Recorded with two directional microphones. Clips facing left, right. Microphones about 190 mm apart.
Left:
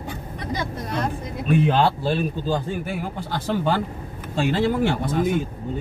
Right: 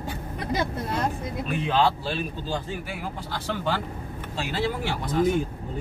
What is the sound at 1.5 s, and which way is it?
A man's voice, 50° left (ahead or behind).